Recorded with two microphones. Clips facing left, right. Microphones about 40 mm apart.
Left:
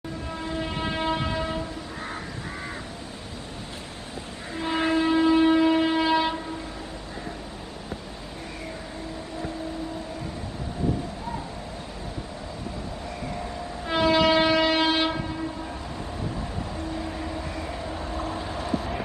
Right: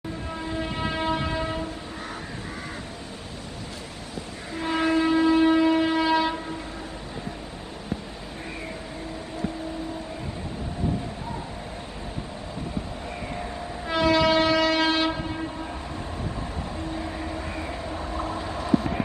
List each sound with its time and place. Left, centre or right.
0.6 s train: centre
1.3 s train: centre
5.0 s siren: centre
5.4 s shofar: centre
5.7 s a sound: centre
13.8 s train: centre
16.9 s vehicle: centre
17.4 s vehicle: right